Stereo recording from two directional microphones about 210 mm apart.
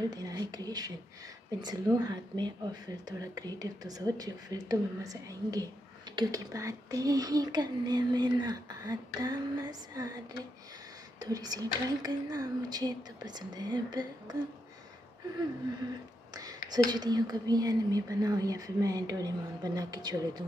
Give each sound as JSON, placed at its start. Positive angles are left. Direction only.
{"t": 0.1, "sound": "speech", "side_deg": -20}
{"t": 11.1, "sound": "speech", "side_deg": -15}
{"t": 16.7, "sound": "speech", "side_deg": -20}